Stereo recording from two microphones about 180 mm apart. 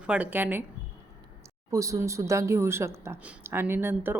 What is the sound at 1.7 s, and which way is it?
A woman's voice, 15° right (ahead or behind).